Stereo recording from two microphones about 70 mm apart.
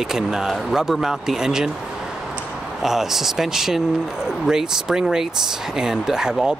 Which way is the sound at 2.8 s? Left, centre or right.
Centre.